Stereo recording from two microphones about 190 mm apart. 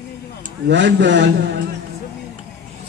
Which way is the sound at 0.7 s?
70° right (ahead or behind).